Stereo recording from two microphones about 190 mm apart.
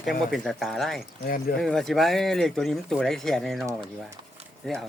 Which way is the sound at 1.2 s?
50° left (ahead or behind).